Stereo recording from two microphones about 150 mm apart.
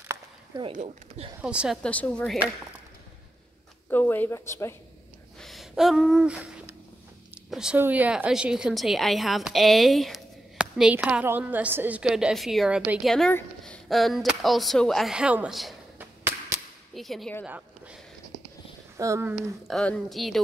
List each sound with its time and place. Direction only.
0.7 s speech: 45° right (ahead or behind)
1.4 s a woman's voice: 5° right (ahead or behind)
1.8 s speech: 10° left (ahead or behind)
3.9 s speech: 15° left (ahead or behind)
5.4 s a sound: centre (ahead or behind)
7.5 s a woman's voice: 5° right (ahead or behind)
16.0 s a sound: 15° right (ahead or behind)
16.9 s speech: centre (ahead or behind)
18.9 s speech: 20° right (ahead or behind)
19.3 s a woman's voice: 5° left (ahead or behind)